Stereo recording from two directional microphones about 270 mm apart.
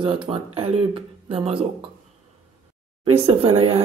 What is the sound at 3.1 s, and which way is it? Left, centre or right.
Speech, right.